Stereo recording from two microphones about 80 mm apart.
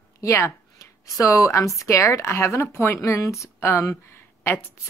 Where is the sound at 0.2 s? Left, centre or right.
Left.